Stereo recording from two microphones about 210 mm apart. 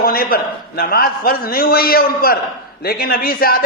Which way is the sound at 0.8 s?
45° left (ahead or behind).